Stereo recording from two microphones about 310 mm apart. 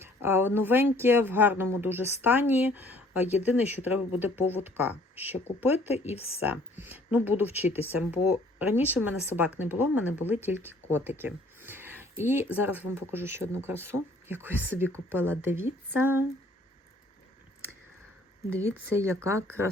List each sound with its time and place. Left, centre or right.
0.0 s speech: centre
6.1 s speech: centre
6.4 s speech: centre
11.2 s a sound: centre
12.2 s speech: centre
18.6 s speech: centre